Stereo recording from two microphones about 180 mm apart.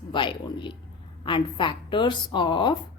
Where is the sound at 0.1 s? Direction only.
25° left (ahead or behind).